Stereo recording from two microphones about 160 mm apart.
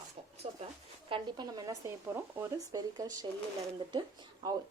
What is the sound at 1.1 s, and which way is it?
Speech, 25° right (ahead or behind).